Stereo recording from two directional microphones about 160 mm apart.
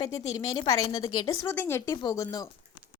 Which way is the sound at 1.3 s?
15° left (ahead or behind).